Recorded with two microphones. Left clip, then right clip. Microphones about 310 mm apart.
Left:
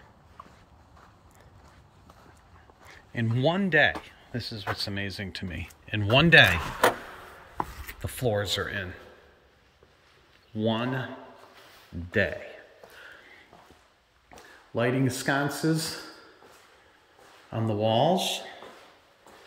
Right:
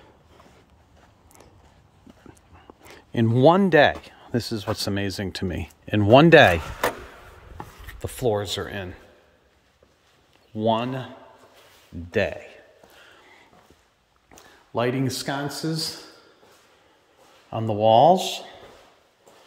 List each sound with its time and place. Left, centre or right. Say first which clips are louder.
3.2 s speech: right 10 dB; centre
8.0 s speech: right 4 dB; centre
10.5 s speech: right 5 dB; centre
12.1 s speech: right 2 dB; centre
14.3 s speech: right 4 dB; centre
17.5 s speech: right 8 dB; centre